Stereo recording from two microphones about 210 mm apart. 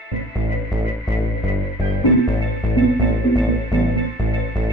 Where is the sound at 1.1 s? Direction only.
Centre (ahead or behind).